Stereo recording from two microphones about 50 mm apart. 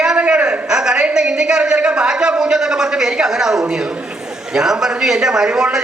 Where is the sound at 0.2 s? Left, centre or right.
Right.